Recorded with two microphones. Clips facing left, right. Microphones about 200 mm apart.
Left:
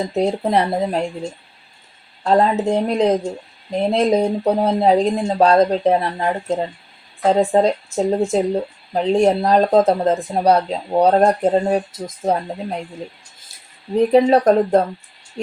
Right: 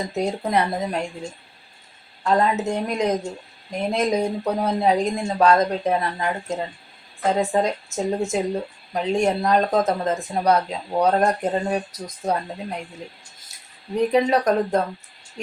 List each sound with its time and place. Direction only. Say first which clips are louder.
0.1 s speech: left 4 dB; 30° left (ahead or behind)
2.2 s speech: left 4 dB; 30° left (ahead or behind)
13.9 s speech: left 6 dB; 30° left (ahead or behind)